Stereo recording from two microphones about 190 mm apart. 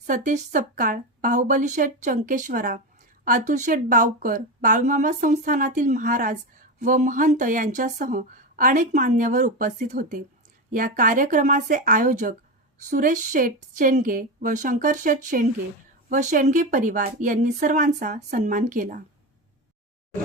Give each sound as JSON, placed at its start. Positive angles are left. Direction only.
{"t": 0.1, "sound": "speech", "side_deg": -40}